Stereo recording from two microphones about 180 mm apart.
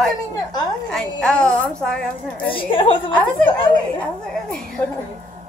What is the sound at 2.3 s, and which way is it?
Speech, 30° left (ahead or behind).